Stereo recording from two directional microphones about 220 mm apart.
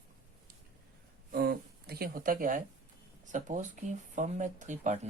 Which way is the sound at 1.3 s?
45° right (ahead or behind).